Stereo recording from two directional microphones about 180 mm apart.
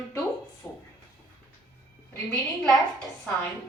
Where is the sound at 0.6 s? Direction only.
5° left (ahead or behind).